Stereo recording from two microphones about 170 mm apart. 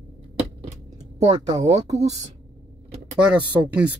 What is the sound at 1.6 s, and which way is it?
Speech, 40° right (ahead or behind).